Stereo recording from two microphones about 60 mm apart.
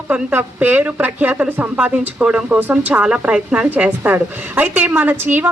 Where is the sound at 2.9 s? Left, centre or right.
Centre.